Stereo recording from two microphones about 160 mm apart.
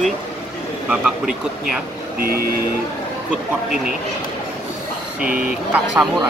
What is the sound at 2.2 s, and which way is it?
Music, 75° right (ahead or behind).